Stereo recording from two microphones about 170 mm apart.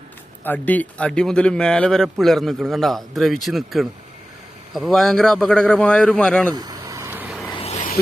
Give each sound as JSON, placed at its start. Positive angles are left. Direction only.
{"t": 0.4, "sound": "speech", "side_deg": 10}
{"t": 6.5, "sound": "vehicle", "side_deg": -25}
{"t": 7.5, "sound": "a sound", "side_deg": 35}